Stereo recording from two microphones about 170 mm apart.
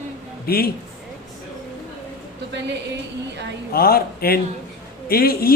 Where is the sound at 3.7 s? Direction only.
60° left (ahead or behind).